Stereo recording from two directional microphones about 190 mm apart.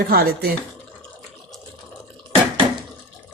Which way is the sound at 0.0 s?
55° right (ahead or behind).